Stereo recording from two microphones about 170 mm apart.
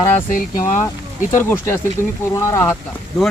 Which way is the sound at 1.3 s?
15° left (ahead or behind).